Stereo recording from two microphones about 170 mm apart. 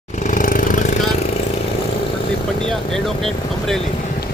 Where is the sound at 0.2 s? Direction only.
50° left (ahead or behind).